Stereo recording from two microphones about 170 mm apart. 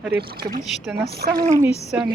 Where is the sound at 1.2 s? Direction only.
55° right (ahead or behind).